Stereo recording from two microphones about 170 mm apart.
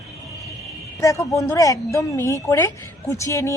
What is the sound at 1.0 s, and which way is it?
Speech, 20° left (ahead or behind).